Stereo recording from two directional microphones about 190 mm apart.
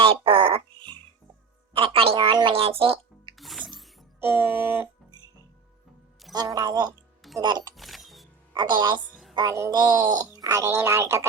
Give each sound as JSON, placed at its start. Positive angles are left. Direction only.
{"t": 0.0, "sound": "a sound", "side_deg": -30}
{"t": 1.7, "sound": "speech", "side_deg": -30}
{"t": 3.3, "sound": "music", "side_deg": 0}
{"t": 6.3, "sound": "a woman's voice", "side_deg": -20}
{"t": 7.8, "sound": "music", "side_deg": 0}
{"t": 8.5, "sound": "a woman's voice", "side_deg": -25}
{"t": 9.0, "sound": "music", "side_deg": -5}
{"t": 9.3, "sound": "speech", "side_deg": -20}